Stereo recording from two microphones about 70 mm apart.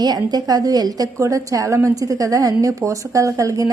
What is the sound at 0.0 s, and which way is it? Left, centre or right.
A woman's voice, right.